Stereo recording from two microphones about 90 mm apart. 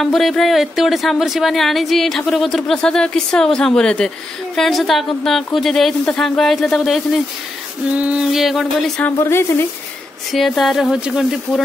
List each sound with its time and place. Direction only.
0.0 s speech: centre (ahead or behind)
7.9 s speech: 15° right (ahead or behind)
9.2 s speech: 30° left (ahead or behind)
10.3 s speech: centre (ahead or behind)